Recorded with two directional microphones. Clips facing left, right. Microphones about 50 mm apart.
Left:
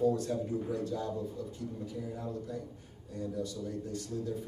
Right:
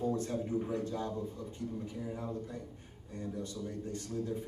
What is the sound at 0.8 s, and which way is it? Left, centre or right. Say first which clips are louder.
Speech: left 2 dB; right.